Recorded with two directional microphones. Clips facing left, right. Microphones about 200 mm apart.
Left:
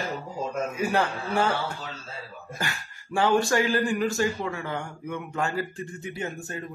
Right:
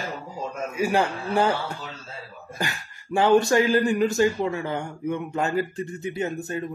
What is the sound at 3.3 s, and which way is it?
A man's voice, 20° right (ahead or behind).